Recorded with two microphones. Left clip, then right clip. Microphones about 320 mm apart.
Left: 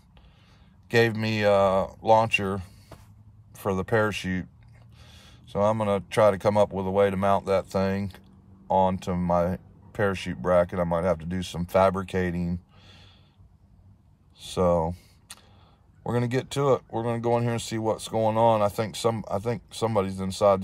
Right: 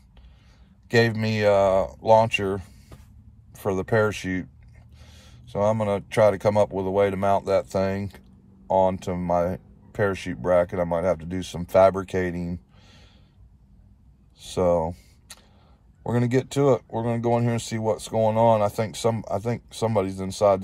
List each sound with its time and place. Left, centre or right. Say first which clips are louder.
0.8 s speech: right 1 dB; centre
14.4 s camera: right 2 dB; centre
16.0 s speech: right 3 dB; centre